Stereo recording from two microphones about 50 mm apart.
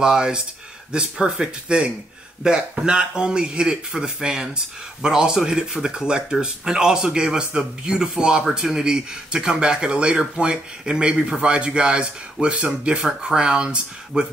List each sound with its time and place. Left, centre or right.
0.0 s speech: centre